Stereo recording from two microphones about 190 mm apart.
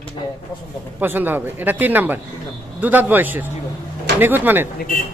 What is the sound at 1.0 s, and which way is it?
A man's voice, 10° right (ahead or behind).